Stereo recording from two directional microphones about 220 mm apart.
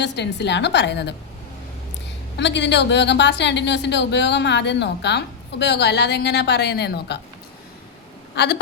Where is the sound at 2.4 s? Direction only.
50° left (ahead or behind).